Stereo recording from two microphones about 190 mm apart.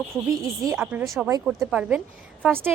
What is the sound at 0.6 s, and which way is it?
Speech, 15° right (ahead or behind).